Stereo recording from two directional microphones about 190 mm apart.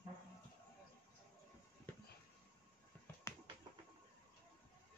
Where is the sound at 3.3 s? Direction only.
15° left (ahead or behind).